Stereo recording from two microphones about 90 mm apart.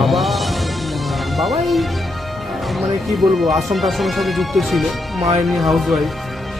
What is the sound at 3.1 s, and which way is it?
Speech, centre (ahead or behind).